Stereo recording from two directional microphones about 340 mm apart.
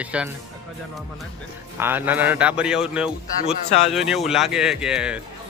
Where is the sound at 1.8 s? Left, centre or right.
Centre.